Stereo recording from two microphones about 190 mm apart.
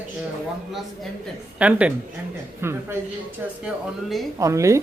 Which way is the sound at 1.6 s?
5° right (ahead or behind).